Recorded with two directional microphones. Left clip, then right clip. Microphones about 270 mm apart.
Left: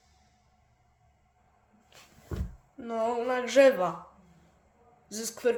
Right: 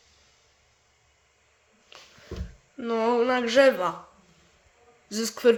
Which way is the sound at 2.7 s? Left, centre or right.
Centre.